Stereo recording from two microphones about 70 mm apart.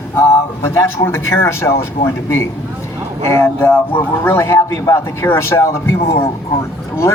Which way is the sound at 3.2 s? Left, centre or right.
Left.